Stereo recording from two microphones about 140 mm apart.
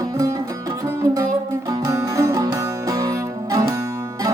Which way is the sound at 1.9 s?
20° right (ahead or behind).